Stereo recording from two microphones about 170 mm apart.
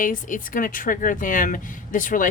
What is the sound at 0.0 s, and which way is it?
Speech, 50° left (ahead or behind).